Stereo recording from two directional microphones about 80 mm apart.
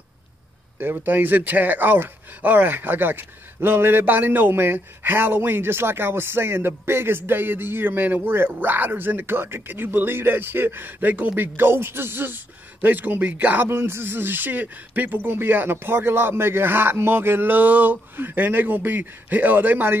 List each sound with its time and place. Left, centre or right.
0.7 s speech: right